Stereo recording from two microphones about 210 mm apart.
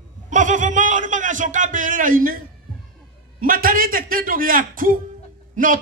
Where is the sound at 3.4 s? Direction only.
40° right (ahead or behind).